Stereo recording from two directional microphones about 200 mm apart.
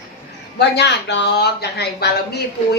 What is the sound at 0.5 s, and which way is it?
Speech, 60° left (ahead or behind).